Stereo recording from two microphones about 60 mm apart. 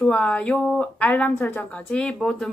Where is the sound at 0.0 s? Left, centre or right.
Centre.